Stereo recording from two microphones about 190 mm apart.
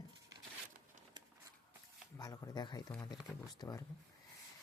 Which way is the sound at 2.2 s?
20° left (ahead or behind).